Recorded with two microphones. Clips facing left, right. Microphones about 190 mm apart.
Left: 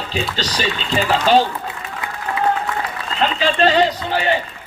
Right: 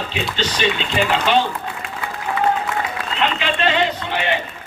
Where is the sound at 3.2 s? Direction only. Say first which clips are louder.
Left 4 dB; 35° left (ahead or behind).